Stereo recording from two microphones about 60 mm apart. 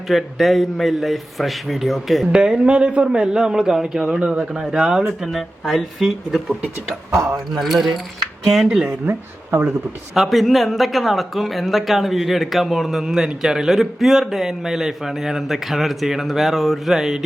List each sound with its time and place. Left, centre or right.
0.1 s speech: centre
2.3 s a man's voice: centre
7.1 s speech: right
7.5 s a man's voice: centre
9.0 s speech: right
10.2 s speech: centre